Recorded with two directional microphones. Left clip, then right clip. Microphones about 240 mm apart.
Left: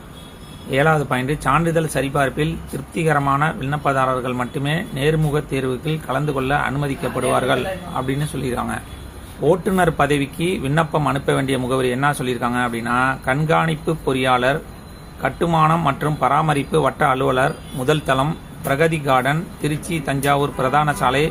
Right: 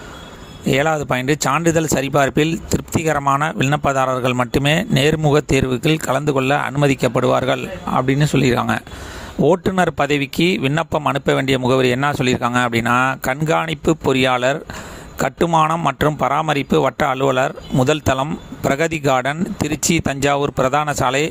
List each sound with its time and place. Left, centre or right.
0.7 s speech: right